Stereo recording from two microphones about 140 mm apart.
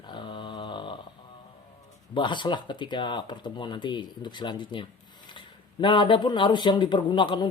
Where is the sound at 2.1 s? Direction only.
35° left (ahead or behind).